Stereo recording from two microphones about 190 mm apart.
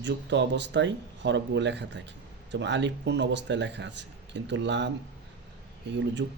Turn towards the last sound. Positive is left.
turn(degrees=-65)  # may be behind; listen again after turning